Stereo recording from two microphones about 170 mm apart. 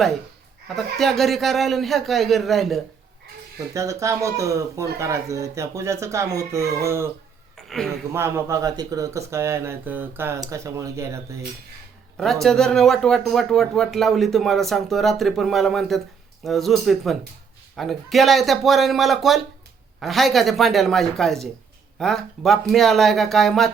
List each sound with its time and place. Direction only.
0.8 s speech: centre (ahead or behind)
3.8 s speech: 20° right (ahead or behind)
7.5 s a sound: centre (ahead or behind)
8.1 s speech: 15° right (ahead or behind)
12.1 s speech: centre (ahead or behind)